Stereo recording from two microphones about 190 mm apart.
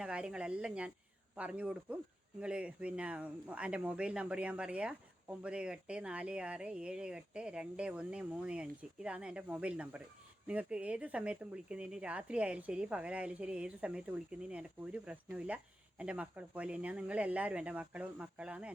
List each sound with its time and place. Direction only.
0.0 s speech: 5° right (ahead or behind)